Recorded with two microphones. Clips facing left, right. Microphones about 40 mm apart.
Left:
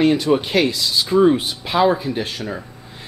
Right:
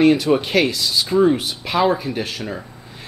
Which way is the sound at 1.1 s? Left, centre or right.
Centre.